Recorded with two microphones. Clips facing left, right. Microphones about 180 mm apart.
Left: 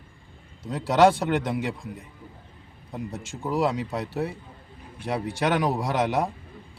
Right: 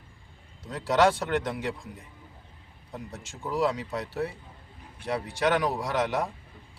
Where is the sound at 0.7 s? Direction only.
10° left (ahead or behind).